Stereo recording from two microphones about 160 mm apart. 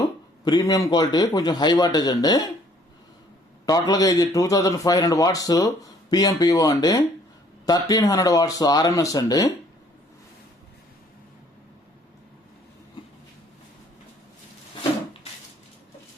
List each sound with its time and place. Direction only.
0.0 s a man's voice: 25° left (ahead or behind)
3.7 s a man's voice: 25° left (ahead or behind)